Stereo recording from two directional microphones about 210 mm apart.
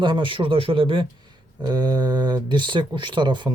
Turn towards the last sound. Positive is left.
turn(degrees=-20)  # may be behind; listen again after turning